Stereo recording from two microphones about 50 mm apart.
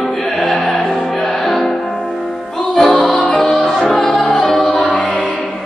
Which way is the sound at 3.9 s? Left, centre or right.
Centre.